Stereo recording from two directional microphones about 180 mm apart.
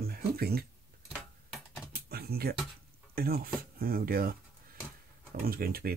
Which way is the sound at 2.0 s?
60° right (ahead or behind).